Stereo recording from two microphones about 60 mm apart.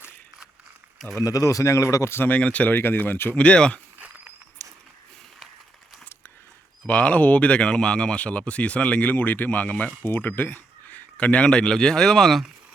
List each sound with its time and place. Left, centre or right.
1.1 s speech: left
2.2 s speech: left
2.7 s speech: left
3.4 s speech: left
4.6 s a sound: left
6.8 s speech: left
10.0 s speech: left
11.4 s speech: centre